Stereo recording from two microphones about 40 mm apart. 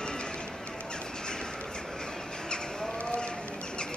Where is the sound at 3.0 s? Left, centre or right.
Left.